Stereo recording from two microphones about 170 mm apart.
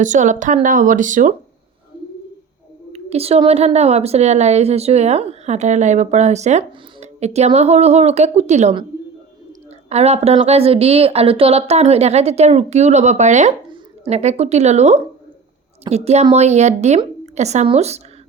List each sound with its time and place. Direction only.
0.0 s speech: 45° right (ahead or behind)
2.9 s a woman's voice: 35° right (ahead or behind)
9.9 s a woman's voice: 40° right (ahead or behind)